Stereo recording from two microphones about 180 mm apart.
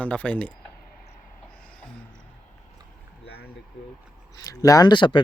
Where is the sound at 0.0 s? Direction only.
5° left (ahead or behind).